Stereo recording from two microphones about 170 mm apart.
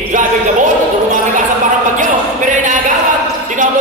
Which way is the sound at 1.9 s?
50° right (ahead or behind).